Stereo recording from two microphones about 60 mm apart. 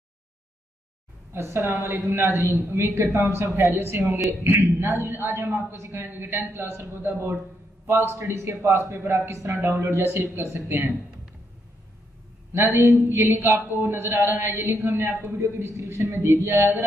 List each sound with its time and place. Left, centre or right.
1.3 s a man's voice: right
12.5 s a man's voice: right
12.9 s a man's voice: right
15.0 s a man's voice: right